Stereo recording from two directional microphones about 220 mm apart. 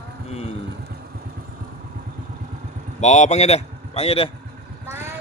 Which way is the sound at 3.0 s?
30° left (ahead or behind).